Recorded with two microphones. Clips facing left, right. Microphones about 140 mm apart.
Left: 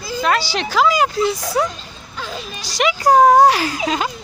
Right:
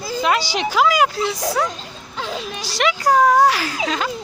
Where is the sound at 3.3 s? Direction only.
25° left (ahead or behind).